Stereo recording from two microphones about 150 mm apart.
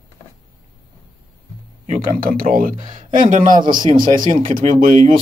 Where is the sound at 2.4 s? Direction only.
65° right (ahead or behind).